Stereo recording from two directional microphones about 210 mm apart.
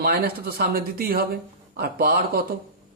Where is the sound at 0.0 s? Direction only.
45° right (ahead or behind).